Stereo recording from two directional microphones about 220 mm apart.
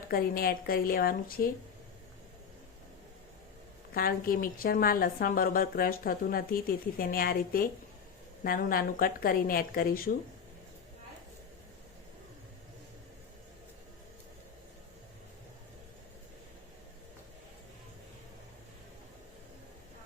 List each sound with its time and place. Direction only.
0.1 s a woman's voice: 45° left (ahead or behind)
3.9 s a woman's voice: 40° left (ahead or behind)